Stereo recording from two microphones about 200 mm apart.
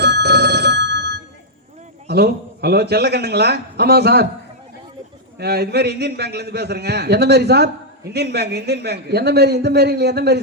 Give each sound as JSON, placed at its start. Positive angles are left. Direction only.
{"t": 0.0, "sound": "telephone bell ringing", "side_deg": -55}
{"t": 2.0, "sound": "a man's voice", "side_deg": -55}
{"t": 5.4, "sound": "a man's voice", "side_deg": -55}